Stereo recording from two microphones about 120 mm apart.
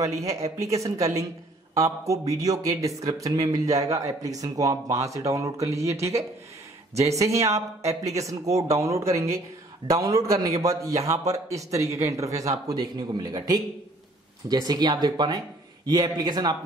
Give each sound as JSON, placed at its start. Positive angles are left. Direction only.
{"t": 0.0, "sound": "a man's voice", "side_deg": -25}